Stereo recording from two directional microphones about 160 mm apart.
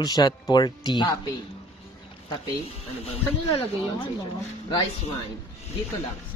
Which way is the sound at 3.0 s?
40° left (ahead or behind).